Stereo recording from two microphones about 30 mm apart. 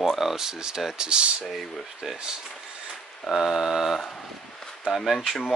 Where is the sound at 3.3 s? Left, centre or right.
Centre.